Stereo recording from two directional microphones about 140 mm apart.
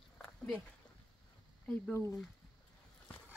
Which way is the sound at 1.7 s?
20° left (ahead or behind).